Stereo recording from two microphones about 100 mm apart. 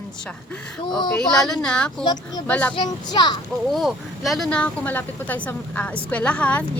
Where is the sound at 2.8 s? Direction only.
45° left (ahead or behind).